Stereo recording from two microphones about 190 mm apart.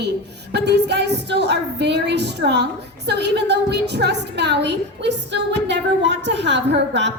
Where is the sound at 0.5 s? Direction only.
60° right (ahead or behind).